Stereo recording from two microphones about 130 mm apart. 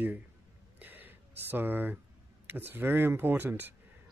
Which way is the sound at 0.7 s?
15° right (ahead or behind).